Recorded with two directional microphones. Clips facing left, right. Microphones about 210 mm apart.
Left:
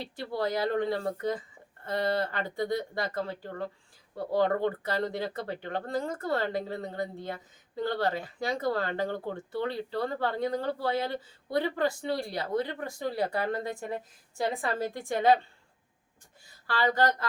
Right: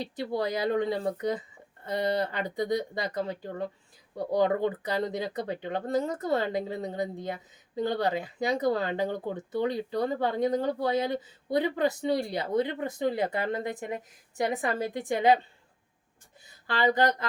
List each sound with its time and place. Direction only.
0.0 s speech: 15° right (ahead or behind)
16.6 s speech: 20° right (ahead or behind)